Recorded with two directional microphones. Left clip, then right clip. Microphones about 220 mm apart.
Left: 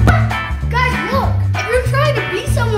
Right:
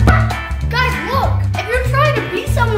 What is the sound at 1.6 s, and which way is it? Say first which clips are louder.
Music: even; centre (ahead or behind).